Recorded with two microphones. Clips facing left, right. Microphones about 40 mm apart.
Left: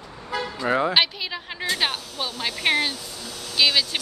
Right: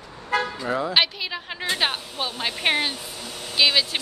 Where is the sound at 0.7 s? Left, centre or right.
Left.